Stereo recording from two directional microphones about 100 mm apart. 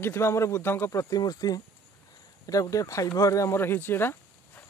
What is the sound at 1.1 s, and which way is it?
Speech, 40° left (ahead or behind).